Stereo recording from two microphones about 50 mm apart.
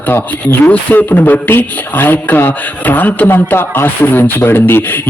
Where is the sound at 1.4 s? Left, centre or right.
Left.